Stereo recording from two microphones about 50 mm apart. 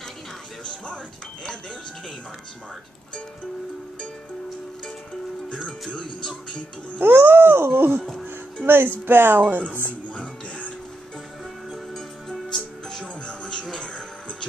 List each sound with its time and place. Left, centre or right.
5.5 s music: centre
5.9 s speech: centre
7.0 s a sound: right
10.0 s music: left
11.7 s music: centre
13.0 s music: left